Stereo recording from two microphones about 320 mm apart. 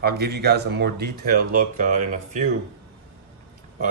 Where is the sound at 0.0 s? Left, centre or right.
Right.